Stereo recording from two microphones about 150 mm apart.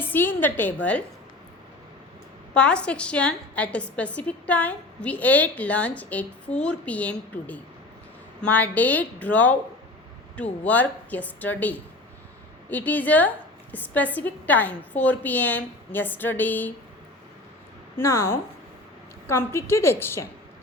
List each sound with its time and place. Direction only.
0.0 s a woman's voice: 15° left (ahead or behind)
2.6 s a woman's voice: 5° left (ahead or behind)
17.9 s a woman's voice: 15° left (ahead or behind)